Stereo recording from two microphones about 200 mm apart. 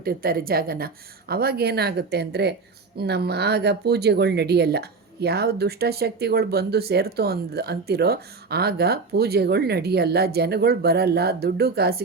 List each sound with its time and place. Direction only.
0.0 s speech: 50° right (ahead or behind)